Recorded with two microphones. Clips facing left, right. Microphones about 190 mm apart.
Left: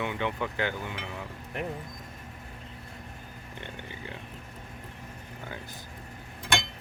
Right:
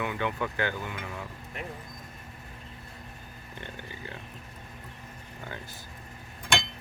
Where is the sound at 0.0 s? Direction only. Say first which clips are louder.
Even; 20° left (ahead or behind).